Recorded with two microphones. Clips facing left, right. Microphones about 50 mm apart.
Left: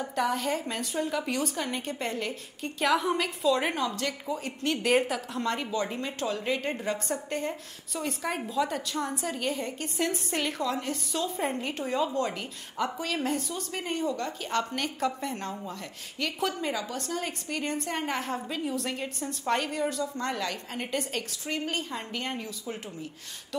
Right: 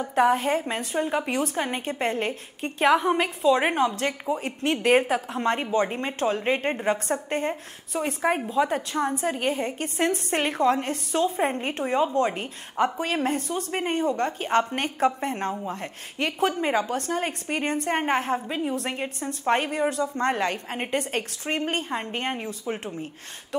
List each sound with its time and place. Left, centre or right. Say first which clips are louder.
0.0 s a woman's voice: right 7 dB; right
2.9 s a woman's voice: right 5 dB; right